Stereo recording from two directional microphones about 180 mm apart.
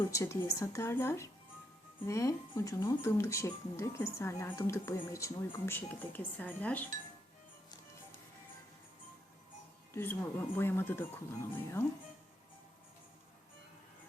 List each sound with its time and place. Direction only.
0.0 s speech: 15° left (ahead or behind)
9.9 s speech: 10° left (ahead or behind)